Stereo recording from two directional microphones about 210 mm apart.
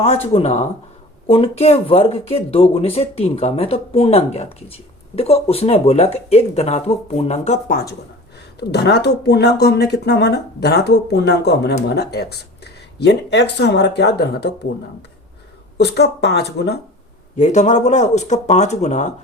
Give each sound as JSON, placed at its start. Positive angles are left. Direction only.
{"t": 0.0, "sound": "speech", "side_deg": 30}
{"t": 8.5, "sound": "speech", "side_deg": 50}
{"t": 15.8, "sound": "speech", "side_deg": 50}
{"t": 17.3, "sound": "speech", "side_deg": 35}